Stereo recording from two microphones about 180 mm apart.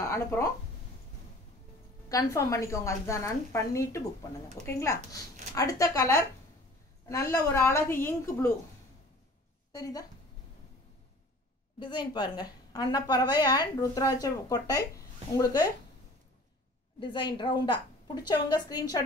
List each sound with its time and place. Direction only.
0.0 s speech: 15° left (ahead or behind)
2.0 s a woman's voice: 20° left (ahead or behind)
9.7 s a woman's voice: 20° left (ahead or behind)
11.8 s a woman's voice: 25° left (ahead or behind)
17.0 s a woman's voice: 25° left (ahead or behind)